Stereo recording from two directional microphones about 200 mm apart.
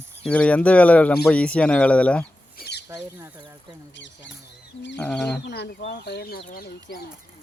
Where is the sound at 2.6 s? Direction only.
55° left (ahead or behind).